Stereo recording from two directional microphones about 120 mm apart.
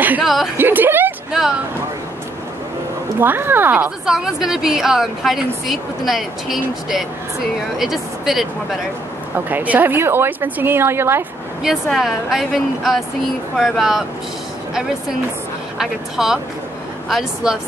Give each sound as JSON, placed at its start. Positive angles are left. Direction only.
{"t": 0.2, "sound": "a woman's voice", "side_deg": 0}
{"t": 0.6, "sound": "a woman's voice", "side_deg": -20}
{"t": 3.2, "sound": "a woman's voice", "side_deg": -15}
{"t": 9.5, "sound": "a woman's voice", "side_deg": -15}
{"t": 11.6, "sound": "a woman's voice", "side_deg": -5}